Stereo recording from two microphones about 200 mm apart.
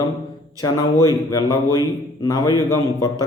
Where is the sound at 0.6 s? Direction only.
15° left (ahead or behind).